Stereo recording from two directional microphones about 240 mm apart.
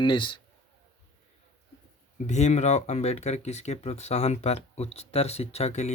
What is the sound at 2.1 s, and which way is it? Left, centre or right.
Speech, left.